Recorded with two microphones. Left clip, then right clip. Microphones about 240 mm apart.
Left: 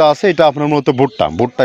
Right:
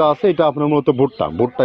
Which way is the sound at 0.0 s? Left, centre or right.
Left.